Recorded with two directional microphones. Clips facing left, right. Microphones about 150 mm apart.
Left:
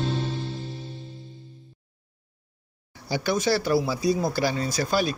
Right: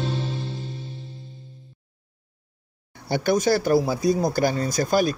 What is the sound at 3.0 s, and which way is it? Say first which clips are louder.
Speech: right 4 dB; 55° right (ahead or behind).